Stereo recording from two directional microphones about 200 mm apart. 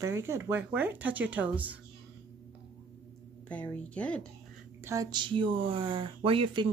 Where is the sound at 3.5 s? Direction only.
5° left (ahead or behind).